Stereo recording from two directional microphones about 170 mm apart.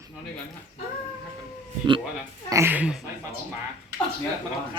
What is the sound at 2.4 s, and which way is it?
Speech, 15° right (ahead or behind).